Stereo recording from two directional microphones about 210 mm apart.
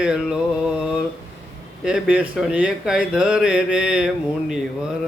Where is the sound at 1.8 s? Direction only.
5° right (ahead or behind).